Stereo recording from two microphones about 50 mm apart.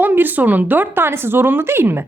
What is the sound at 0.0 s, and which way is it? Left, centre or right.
A woman's voice, right.